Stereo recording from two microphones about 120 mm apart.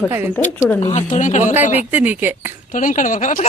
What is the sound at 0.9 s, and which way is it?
Speech, 90° left.